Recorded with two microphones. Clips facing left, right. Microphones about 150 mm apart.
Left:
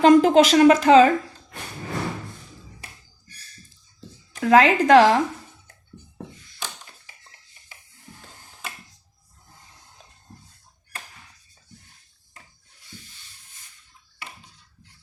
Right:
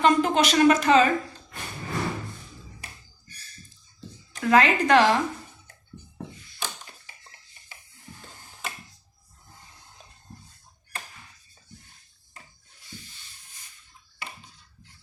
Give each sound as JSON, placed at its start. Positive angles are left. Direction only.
{"t": 0.0, "sound": "speech", "side_deg": 90}
{"t": 4.4, "sound": "speech", "side_deg": 90}